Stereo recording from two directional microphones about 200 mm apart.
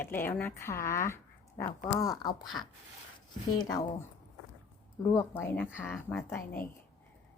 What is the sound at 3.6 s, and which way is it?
Speech, 20° left (ahead or behind).